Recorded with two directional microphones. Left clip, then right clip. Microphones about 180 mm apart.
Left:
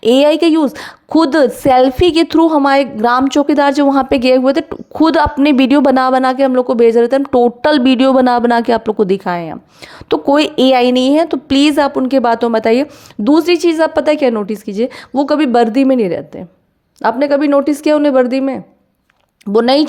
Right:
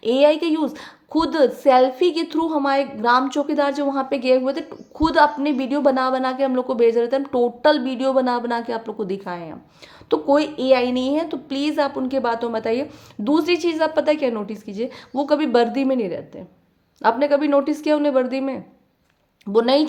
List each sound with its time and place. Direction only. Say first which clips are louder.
0.0 s a woman's voice: left 7 dB; 45° left (ahead or behind)